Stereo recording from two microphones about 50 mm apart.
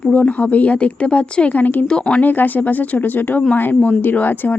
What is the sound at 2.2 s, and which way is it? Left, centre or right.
A woman's voice, left.